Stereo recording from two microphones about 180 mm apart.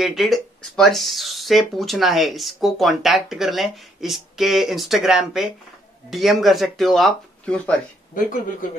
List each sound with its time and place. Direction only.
0.0 s speech: centre (ahead or behind)
8.1 s speech: 50° left (ahead or behind)